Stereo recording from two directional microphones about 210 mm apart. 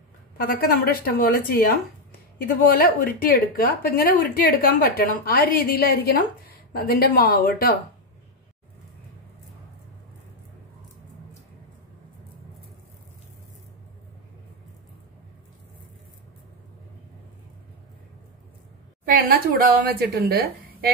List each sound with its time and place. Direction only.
0.4 s a woman's voice: 45° left (ahead or behind)
2.7 s a woman's voice: 45° left (ahead or behind)
19.1 s a woman's voice: 45° right (ahead or behind)